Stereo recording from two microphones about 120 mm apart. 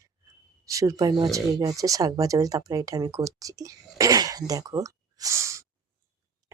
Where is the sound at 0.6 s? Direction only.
25° right (ahead or behind).